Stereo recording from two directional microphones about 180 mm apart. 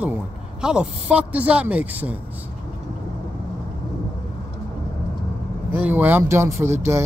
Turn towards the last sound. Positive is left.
turn(degrees=-15)  # may be behind; listen again after turning